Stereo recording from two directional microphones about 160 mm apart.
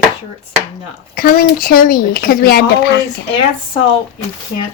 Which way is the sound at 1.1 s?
65° left (ahead or behind).